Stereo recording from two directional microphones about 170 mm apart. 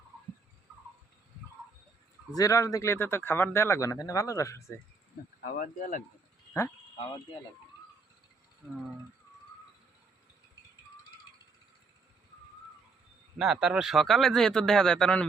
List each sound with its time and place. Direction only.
2.3 s speech: 20° left (ahead or behind)
5.5 s speech: 50° left (ahead or behind)
13.4 s speech: 5° right (ahead or behind)